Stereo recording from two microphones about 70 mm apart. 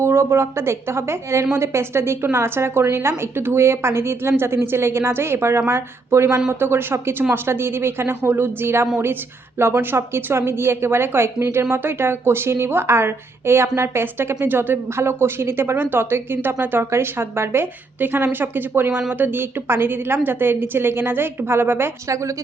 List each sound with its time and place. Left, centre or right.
0.0 s a woman's voice: right